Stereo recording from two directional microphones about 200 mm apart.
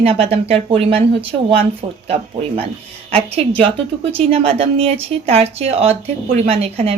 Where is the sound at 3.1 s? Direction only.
30° right (ahead or behind).